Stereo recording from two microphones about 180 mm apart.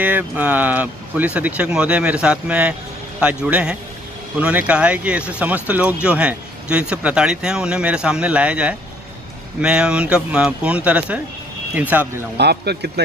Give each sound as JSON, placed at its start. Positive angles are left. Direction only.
{"t": 0.0, "sound": "speech", "side_deg": -10}
{"t": 12.4, "sound": "speech", "side_deg": -65}